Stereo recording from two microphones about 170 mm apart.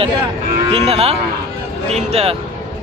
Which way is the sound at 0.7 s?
35° right (ahead or behind).